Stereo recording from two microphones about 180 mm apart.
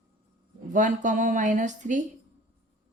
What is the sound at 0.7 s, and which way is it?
Speech, 45° right (ahead or behind).